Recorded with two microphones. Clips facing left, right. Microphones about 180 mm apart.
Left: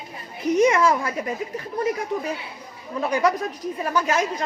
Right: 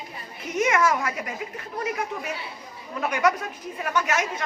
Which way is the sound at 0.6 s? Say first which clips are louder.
Left 3 dB; 30° left (ahead or behind).